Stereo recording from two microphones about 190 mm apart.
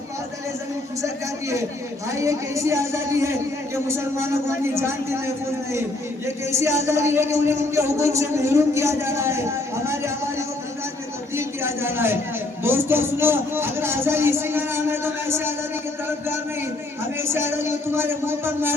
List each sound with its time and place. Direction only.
1.0 s a man's voice: 15° right (ahead or behind)
17.2 s a man's voice: 15° right (ahead or behind)